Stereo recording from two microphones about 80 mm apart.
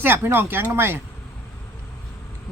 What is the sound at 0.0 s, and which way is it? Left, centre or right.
Speech, right.